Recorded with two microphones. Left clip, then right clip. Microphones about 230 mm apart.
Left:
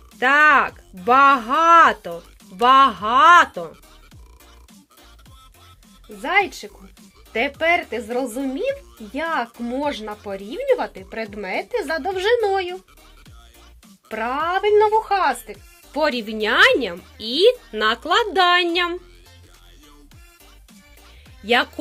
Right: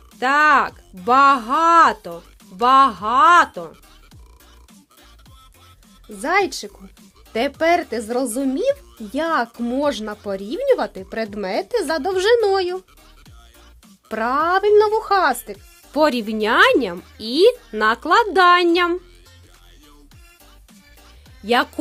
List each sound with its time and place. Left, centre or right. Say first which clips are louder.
0.1 s speech: left 1 dB; centre
6.2 s speech: right 1 dB; right
14.1 s speech: right 4 dB; right
21.4 s speech: even; right